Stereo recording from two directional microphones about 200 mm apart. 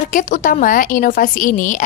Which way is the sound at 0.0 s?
40° left (ahead or behind).